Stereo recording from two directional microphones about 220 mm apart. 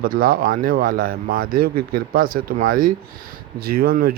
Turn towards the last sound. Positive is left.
turn(degrees=-45)  # may be behind; listen again after turning